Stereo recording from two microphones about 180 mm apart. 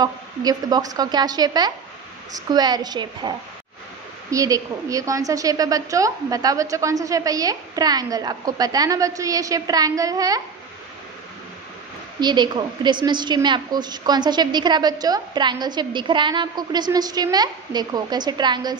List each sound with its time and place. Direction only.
0.0 s a woman's voice: 20° right (ahead or behind)
12.2 s a woman's voice: 25° right (ahead or behind)